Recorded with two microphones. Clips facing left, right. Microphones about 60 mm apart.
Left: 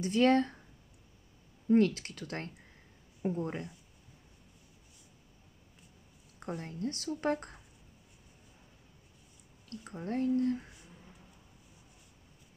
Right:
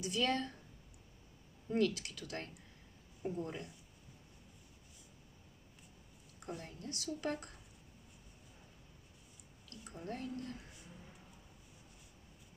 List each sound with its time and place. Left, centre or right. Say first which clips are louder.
0.0 s speech: left 9 dB; left
1.7 s speech: left 8 dB; left
3.2 s speech: left 6 dB; left
3.4 s speech: left 6 dB; left
6.4 s speech: left 9 dB; left
9.7 s speech: left 7 dB; left